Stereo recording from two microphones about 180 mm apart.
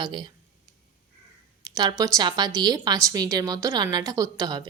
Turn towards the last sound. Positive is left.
turn(degrees=-20)  # may be behind; listen again after turning